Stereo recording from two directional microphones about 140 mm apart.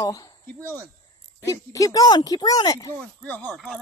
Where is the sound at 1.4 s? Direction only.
25° left (ahead or behind).